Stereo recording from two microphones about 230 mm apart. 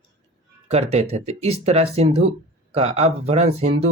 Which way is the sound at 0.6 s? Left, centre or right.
Right.